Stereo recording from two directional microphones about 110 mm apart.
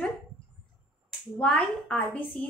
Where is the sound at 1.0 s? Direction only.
10° left (ahead or behind).